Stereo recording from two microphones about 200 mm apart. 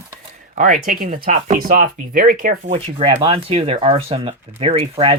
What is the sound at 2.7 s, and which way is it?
Speech, 25° right (ahead or behind).